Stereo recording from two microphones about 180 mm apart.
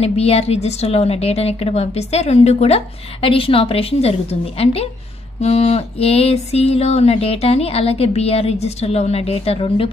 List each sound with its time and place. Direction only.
0.0 s a woman's voice: 35° left (ahead or behind)